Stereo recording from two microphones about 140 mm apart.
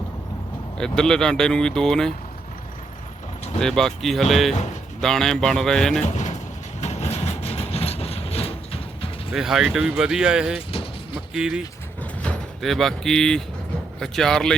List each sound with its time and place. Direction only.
0.8 s speech: 5° left (ahead or behind)
3.6 s speech: 5° left (ahead or behind)
6.0 s speech: 55° left (ahead or behind)
6.8 s vehicle: 50° left (ahead or behind)
9.3 s speech: 5° right (ahead or behind)